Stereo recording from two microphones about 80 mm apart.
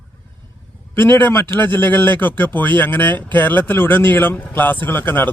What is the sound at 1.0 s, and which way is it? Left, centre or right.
Speech, left.